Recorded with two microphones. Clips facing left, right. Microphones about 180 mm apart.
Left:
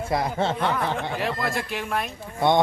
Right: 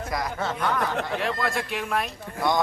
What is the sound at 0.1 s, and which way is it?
Speech, 25° left (ahead or behind).